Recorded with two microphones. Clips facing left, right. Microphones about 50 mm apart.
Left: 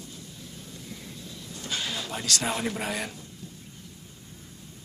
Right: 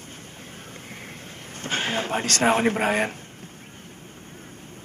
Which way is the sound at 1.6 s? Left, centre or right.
Right.